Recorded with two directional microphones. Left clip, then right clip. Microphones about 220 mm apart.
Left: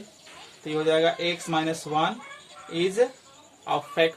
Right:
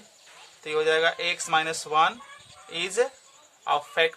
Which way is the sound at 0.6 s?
35° right (ahead or behind).